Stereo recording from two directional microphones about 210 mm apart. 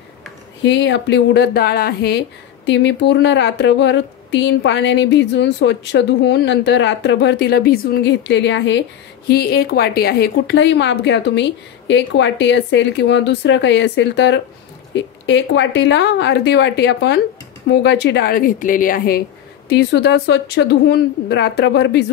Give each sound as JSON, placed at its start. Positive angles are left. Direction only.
{"t": 0.6, "sound": "a woman's voice", "side_deg": 55}